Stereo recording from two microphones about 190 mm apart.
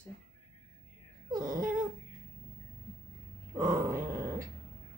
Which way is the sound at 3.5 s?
20° right (ahead or behind).